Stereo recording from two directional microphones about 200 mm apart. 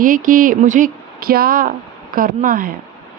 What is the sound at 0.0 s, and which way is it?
Speech, 40° right (ahead or behind).